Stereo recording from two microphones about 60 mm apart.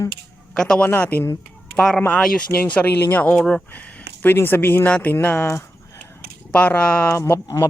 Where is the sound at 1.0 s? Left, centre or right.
Left.